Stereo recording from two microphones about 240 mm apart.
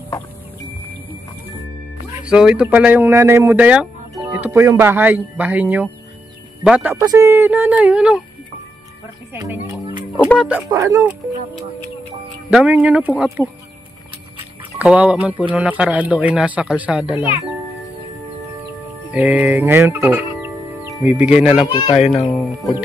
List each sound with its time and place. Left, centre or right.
2.2 s speech: centre
9.3 s music: centre
10.7 s speech: centre
12.4 s speech: centre
14.8 s speech: centre
19.1 s speech: centre
21.7 s speech: left
22.3 s speech: centre